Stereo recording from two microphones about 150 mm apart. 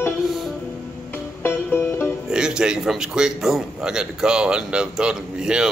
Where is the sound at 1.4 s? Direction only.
15° left (ahead or behind).